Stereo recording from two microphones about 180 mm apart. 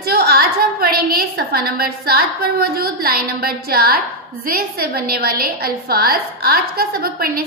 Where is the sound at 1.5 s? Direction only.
55° right (ahead or behind).